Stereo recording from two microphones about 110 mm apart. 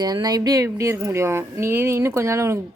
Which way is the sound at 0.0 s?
35° right (ahead or behind).